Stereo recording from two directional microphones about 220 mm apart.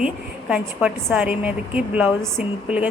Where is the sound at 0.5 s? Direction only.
5° right (ahead or behind).